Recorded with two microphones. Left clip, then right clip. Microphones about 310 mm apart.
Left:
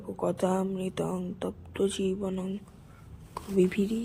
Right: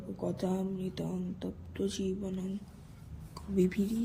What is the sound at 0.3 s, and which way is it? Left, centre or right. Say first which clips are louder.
Speech: left 7 dB; centre.